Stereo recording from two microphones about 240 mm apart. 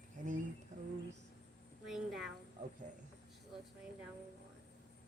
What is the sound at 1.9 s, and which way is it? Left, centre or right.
Speech, centre.